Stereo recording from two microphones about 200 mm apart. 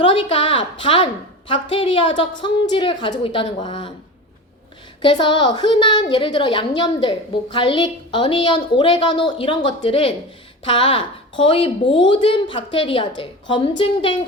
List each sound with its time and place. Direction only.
0.0 s a sound: 25° left (ahead or behind)
1.7 s a woman's voice: 25° left (ahead or behind)
5.0 s a woman's voice: 25° left (ahead or behind)